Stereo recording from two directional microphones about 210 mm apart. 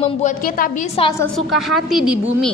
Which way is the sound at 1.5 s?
Centre (ahead or behind).